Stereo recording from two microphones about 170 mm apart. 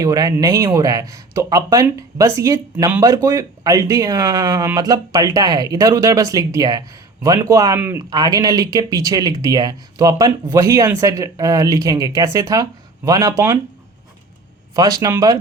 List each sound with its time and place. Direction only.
0.0 s speech: 20° right (ahead or behind)
14.8 s speech: 20° right (ahead or behind)